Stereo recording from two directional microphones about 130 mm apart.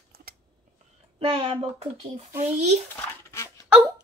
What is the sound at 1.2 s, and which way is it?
Speech, 45° right (ahead or behind).